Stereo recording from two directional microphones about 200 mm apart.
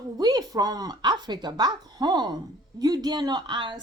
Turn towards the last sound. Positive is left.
turn(degrees=-25)  # may be behind; listen again after turning